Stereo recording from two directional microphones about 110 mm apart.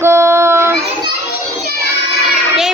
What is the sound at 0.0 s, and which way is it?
Child singing, 25° right (ahead or behind).